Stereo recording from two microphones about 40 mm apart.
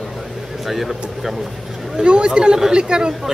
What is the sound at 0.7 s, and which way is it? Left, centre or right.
Speech, centre.